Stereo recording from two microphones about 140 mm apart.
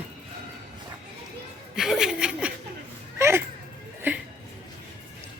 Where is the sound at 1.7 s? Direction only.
Centre (ahead or behind).